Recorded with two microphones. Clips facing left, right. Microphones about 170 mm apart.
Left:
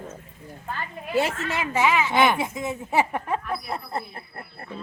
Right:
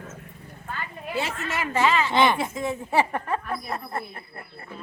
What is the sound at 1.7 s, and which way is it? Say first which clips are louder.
Speech: even; 15° left (ahead or behind).